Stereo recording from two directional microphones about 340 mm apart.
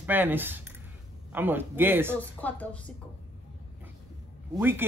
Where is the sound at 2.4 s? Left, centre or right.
Centre.